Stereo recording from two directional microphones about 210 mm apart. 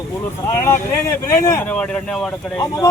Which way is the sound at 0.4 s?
15° left (ahead or behind).